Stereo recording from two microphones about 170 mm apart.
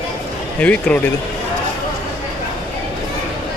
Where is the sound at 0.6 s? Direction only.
10° left (ahead or behind).